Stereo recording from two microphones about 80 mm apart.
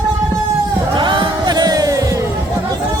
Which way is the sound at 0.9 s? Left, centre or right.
Right.